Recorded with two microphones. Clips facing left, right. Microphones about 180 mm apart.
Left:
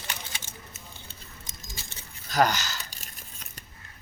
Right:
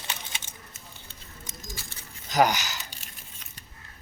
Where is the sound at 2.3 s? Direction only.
15° right (ahead or behind).